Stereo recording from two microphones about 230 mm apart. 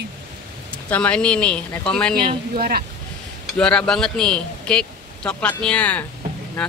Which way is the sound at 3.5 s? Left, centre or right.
Centre.